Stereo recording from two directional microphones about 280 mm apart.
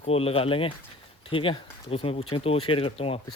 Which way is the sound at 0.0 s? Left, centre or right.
Left.